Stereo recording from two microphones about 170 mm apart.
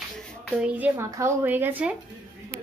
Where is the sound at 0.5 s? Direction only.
10° right (ahead or behind).